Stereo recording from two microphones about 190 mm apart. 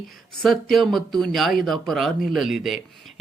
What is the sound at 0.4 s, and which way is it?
Speech, centre (ahead or behind).